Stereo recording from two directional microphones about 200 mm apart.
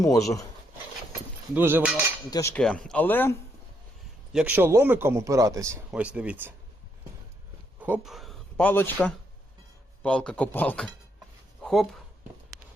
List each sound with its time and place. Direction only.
0.0 s speech: 15° left (ahead or behind)
1.5 s speech: 10° right (ahead or behind)
2.3 s speech: 15° left (ahead or behind)
4.3 s speech: 5° right (ahead or behind)
7.8 s speech: 5° right (ahead or behind)
11.6 s a sound: centre (ahead or behind)